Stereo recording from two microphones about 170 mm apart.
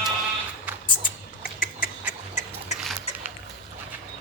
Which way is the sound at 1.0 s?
55° left (ahead or behind).